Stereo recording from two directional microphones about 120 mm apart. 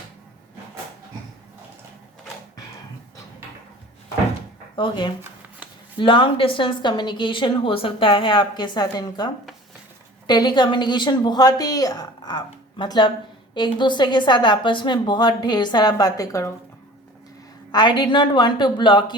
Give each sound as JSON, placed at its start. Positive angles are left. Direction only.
{"t": 4.8, "sound": "a woman's voice", "side_deg": 40}
{"t": 17.7, "sound": "a woman's voice", "side_deg": 40}